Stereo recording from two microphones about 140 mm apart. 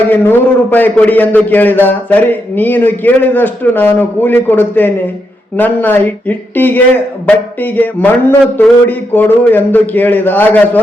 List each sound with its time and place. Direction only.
0.1 s a man's voice: 15° left (ahead or behind)